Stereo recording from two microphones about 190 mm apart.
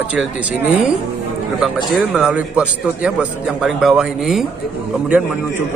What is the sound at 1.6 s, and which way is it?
A man's voice, centre (ahead or behind).